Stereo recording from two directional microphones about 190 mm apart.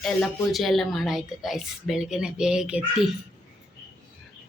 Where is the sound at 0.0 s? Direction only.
Centre (ahead or behind).